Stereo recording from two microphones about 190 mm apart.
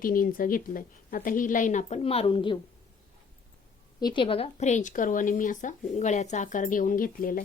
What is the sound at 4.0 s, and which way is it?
Speech, 25° left (ahead or behind).